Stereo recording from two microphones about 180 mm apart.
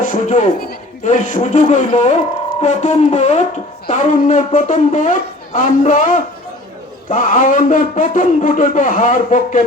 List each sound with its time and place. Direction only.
0.0 s music: 45° left (ahead or behind)
1.0 s a man's voice: 45° left (ahead or behind)